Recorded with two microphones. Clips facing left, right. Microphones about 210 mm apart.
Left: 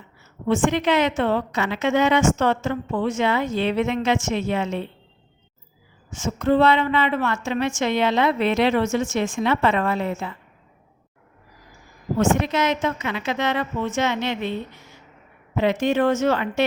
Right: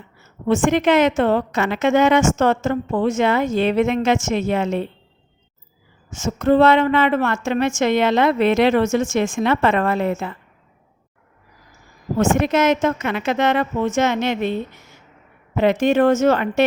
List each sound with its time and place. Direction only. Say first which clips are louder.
0.4 s a woman's voice: right 4 dB; 45° right (ahead or behind)
6.1 s a woman's voice: right 3 dB; 45° right (ahead or behind)
12.1 s a woman's voice: right 3 dB; 45° right (ahead or behind)
15.5 s a woman's voice: right 4 dB; 50° right (ahead or behind)